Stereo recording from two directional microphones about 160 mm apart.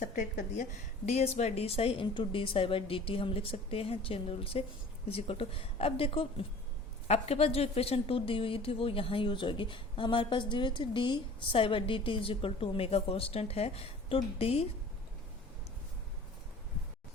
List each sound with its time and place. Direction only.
0.5 s a woman's voice: 50° left (ahead or behind)